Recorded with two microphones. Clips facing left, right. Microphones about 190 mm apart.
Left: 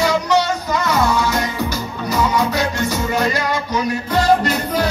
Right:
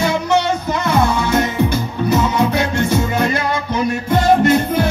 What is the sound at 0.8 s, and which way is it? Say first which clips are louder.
Music: right 2 dB; 55° right (ahead or behind).